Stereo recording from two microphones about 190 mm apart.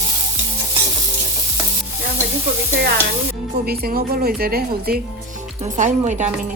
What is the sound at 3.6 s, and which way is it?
A woman's voice, 55° right (ahead or behind).